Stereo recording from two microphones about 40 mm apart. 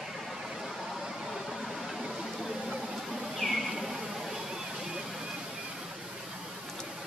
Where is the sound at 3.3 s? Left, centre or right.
Centre.